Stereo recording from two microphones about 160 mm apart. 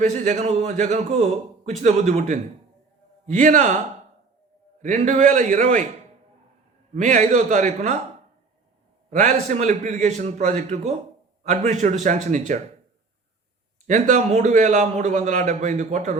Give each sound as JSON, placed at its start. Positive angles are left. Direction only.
{"t": 0.0, "sound": "a man's voice", "side_deg": -45}
{"t": 6.9, "sound": "a man's voice", "side_deg": -50}
{"t": 9.0, "sound": "a man's voice", "side_deg": -50}
{"t": 13.8, "sound": "a man's voice", "side_deg": -50}